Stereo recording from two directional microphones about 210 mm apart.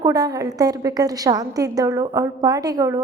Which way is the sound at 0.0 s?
15° right (ahead or behind).